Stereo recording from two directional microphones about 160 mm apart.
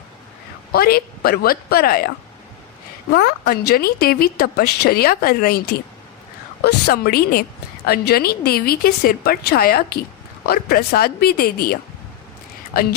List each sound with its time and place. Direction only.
0.7 s speech: 70° left (ahead or behind)
3.2 s speech: 80° left
6.6 s speech: 90° left; by 12.9 s 70° left (ahead or behind)